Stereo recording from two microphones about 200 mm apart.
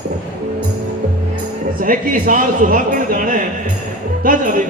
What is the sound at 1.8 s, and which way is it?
A man's voice, 40° right (ahead or behind).